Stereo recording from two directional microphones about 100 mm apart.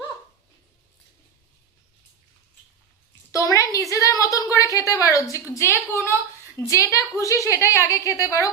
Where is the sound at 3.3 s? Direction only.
35° left (ahead or behind).